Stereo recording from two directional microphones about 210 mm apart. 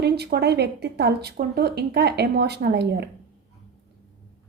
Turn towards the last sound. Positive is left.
turn(degrees=-50)  # may be behind; listen again after turning